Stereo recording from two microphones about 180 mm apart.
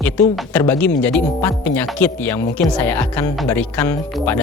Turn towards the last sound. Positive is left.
turn(degrees=10)  # may be behind; listen again after turning